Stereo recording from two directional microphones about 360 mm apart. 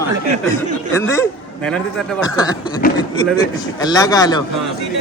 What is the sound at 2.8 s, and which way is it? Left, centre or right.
Speech, left.